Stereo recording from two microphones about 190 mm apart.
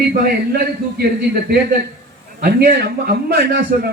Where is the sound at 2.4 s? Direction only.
55° right (ahead or behind).